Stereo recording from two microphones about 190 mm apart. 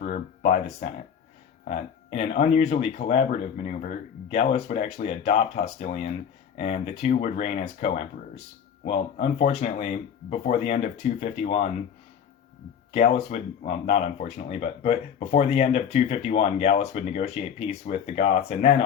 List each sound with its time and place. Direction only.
0.0 s a sound: 40° left (ahead or behind)
1.6 s speech: 35° left (ahead or behind)
12.9 s speech: 35° left (ahead or behind)